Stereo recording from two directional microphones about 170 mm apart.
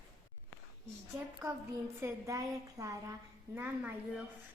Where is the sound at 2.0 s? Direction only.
15° right (ahead or behind).